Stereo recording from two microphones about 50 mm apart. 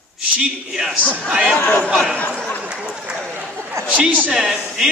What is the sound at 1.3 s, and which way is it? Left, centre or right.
Speech, centre.